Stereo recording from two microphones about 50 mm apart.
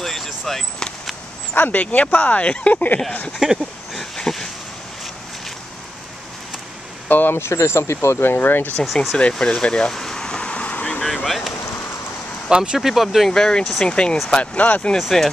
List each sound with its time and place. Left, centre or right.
0.0 s a sound: centre
1.5 s speech: left
3.4 s a sound: centre
3.9 s a sound: centre
7.1 s speech: left
7.3 s speech: left
9.4 s a sound: centre
11.2 s speech: centre
12.4 s speech: centre
12.7 s speech: centre
13.3 s speech: centre
15.1 s speech: centre